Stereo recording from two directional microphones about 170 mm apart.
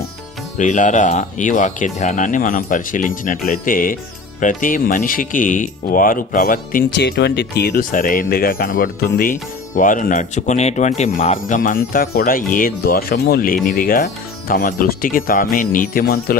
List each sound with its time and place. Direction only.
0.5 s speech: 45° left (ahead or behind)
6.9 s speech: 80° left; by 16.4 s 60° left (ahead or behind)